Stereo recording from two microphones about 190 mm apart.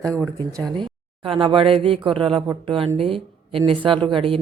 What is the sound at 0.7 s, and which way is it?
Speech, 25° right (ahead or behind).